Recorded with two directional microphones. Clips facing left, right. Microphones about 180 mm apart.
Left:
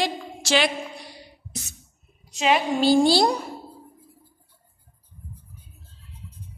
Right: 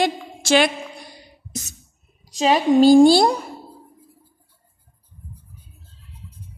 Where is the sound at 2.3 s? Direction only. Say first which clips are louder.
Right 5 dB; 35° right (ahead or behind).